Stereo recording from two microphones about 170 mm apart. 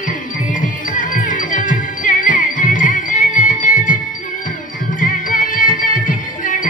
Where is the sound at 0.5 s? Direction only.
50° left (ahead or behind).